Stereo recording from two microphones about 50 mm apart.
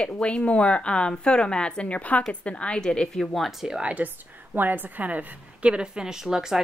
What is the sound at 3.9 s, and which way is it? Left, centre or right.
A woman's voice, right.